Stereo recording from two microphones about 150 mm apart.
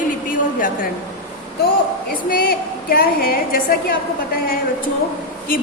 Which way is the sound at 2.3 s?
75° left (ahead or behind).